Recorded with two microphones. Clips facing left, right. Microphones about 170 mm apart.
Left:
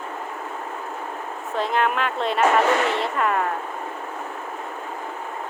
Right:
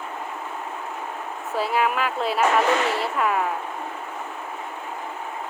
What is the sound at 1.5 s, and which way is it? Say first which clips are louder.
A woman's voice: even; 5° right (ahead or behind).